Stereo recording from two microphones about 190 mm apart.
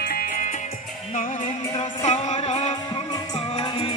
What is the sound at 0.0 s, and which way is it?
Music, 50° left (ahead or behind).